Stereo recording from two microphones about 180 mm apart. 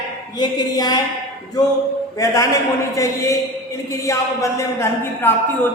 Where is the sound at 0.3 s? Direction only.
25° left (ahead or behind).